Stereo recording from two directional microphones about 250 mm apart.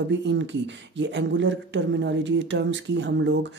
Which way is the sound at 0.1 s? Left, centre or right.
Right.